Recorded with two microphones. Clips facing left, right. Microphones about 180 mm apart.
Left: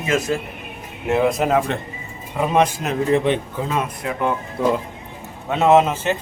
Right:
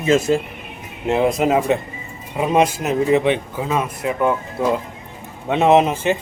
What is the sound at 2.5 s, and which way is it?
Speech, 10° right (ahead or behind).